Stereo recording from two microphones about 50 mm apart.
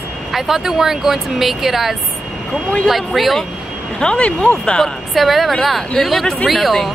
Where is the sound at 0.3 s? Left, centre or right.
Centre.